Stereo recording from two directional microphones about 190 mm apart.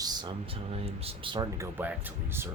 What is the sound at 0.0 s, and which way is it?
Speech, 20° right (ahead or behind).